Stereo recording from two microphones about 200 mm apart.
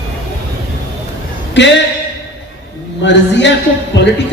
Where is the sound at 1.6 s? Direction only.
60° left (ahead or behind).